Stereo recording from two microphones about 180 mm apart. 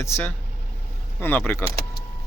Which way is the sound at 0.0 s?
15° left (ahead or behind).